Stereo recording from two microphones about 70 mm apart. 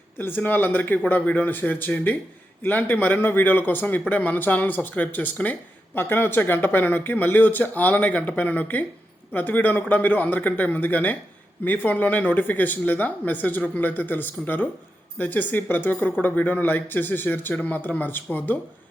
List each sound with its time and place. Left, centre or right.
0.2 s speech: left